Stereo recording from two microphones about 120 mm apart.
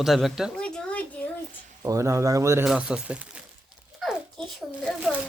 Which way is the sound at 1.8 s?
25° right (ahead or behind).